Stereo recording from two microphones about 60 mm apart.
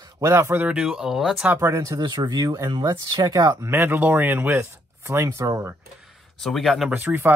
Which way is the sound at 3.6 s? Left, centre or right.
Right.